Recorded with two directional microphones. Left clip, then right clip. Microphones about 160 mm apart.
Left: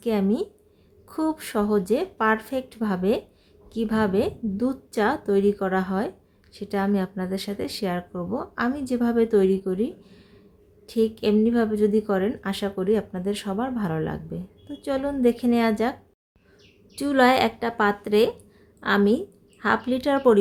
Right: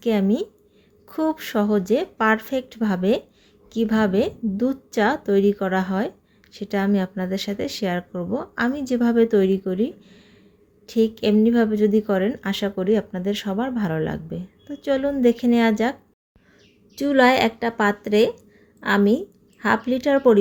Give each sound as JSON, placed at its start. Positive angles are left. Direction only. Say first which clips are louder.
{"t": 0.0, "sound": "a woman's voice", "louder": "right 3 dB", "side_deg": -20}